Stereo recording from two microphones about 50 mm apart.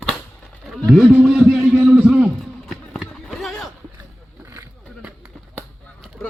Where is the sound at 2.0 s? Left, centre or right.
Centre.